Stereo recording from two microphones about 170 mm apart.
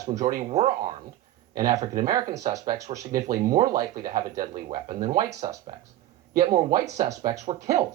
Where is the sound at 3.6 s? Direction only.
55° right (ahead or behind).